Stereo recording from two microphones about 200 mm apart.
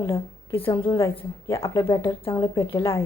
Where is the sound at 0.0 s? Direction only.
15° left (ahead or behind).